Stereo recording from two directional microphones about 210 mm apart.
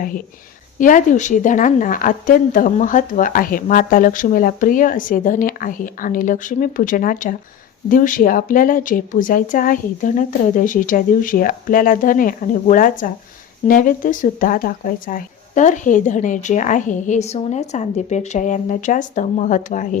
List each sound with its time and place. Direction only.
0.8 s a woman's voice: 40° left (ahead or behind)